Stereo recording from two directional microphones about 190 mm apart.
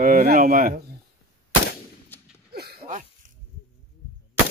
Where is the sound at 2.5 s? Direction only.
55° right (ahead or behind).